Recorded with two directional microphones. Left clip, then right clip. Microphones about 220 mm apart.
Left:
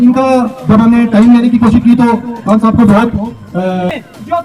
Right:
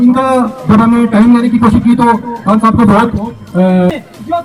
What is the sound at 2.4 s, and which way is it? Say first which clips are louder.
Speech: right 1 dB; 15° left (ahead or behind).